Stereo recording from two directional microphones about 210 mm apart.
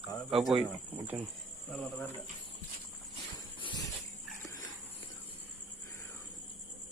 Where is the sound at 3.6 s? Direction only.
25° left (ahead or behind).